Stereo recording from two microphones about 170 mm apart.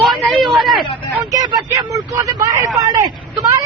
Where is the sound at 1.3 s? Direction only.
20° right (ahead or behind).